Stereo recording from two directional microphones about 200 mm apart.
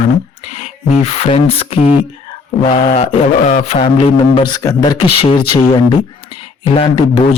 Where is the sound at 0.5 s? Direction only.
30° left (ahead or behind).